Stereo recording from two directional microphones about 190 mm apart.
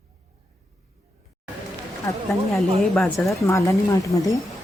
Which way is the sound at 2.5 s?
Centre (ahead or behind).